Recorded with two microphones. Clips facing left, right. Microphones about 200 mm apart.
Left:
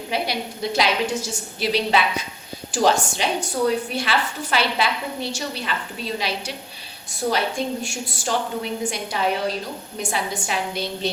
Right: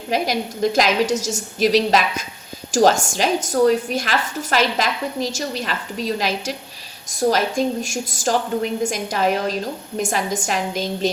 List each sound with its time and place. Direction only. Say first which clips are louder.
0.1 s a woman's voice: right 5 dB; 45° right (ahead or behind)